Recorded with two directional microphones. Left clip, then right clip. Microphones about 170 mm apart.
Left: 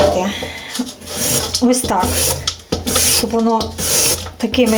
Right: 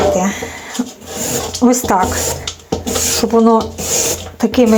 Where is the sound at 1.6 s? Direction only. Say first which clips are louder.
Right 5 dB; 30° right (ahead or behind).